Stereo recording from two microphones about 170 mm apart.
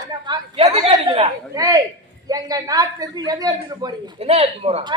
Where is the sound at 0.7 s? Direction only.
35° right (ahead or behind).